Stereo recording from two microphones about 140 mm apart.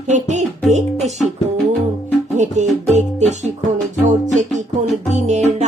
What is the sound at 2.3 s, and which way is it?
Music, 55° right (ahead or behind).